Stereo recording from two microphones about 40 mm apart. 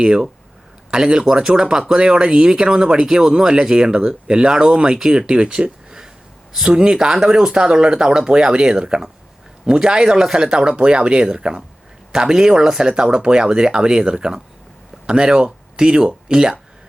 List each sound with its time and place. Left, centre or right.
0.0 s speech: centre
5.3 s speech: right